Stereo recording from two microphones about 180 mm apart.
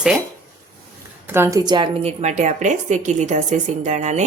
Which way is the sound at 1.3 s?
15° right (ahead or behind).